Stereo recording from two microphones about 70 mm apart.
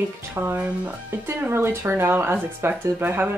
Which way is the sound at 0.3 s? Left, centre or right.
Right.